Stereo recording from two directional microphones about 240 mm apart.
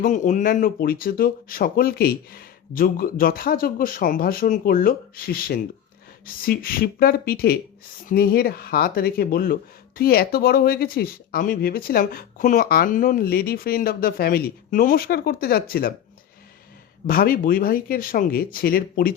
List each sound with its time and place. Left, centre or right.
0.0 s speech: left
17.1 s speech: left